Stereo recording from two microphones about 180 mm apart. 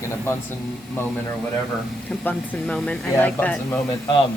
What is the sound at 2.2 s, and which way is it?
Speech, 5° left (ahead or behind).